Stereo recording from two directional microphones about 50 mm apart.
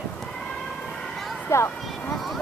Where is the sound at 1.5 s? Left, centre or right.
Left.